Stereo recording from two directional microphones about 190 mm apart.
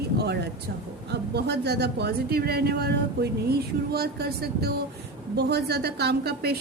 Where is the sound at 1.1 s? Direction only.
60° right (ahead or behind).